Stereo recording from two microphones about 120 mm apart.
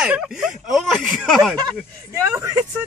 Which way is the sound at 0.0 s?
5° right (ahead or behind).